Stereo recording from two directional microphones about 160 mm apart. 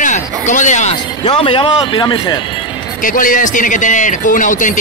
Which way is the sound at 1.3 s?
35° left (ahead or behind).